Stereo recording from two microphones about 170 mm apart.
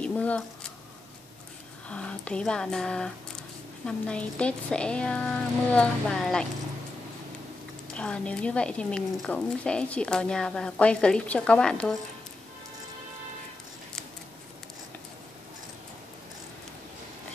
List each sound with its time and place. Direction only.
0.0 s a sound: 5° left (ahead or behind)
1.9 s a woman's voice: 5° left (ahead or behind)
7.9 s a woman's voice: 5° left (ahead or behind)